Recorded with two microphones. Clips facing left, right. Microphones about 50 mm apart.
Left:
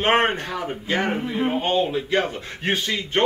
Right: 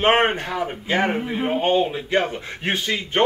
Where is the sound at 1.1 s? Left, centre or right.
Centre.